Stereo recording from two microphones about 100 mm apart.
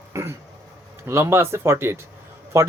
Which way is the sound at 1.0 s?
25° right (ahead or behind).